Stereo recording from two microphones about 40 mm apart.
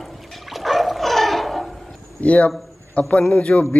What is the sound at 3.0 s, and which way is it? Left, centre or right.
Speech, left.